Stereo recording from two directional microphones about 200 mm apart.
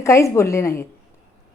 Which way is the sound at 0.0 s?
15° left (ahead or behind).